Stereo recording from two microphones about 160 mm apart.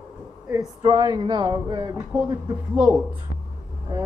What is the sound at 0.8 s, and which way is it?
Speech, 30° right (ahead or behind).